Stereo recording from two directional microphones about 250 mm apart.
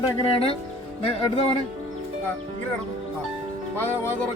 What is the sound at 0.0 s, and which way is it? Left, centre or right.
Speech, left.